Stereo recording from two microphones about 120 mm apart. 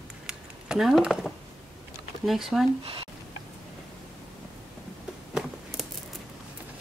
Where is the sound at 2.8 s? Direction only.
50° right (ahead or behind).